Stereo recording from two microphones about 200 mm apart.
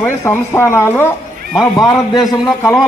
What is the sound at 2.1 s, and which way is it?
Speech, centre (ahead or behind).